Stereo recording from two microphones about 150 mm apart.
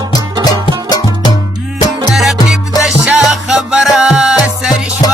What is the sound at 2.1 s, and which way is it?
Music, centre (ahead or behind).